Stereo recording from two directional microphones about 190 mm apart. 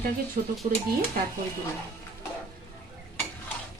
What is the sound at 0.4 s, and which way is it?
Stir, 40° right (ahead or behind).